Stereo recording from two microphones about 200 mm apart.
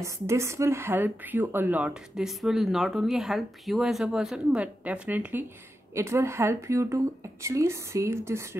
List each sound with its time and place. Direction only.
0.0 s speech: 15° right (ahead or behind)